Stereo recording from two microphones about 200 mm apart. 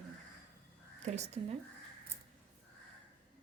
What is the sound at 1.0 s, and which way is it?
Speech, 35° right (ahead or behind).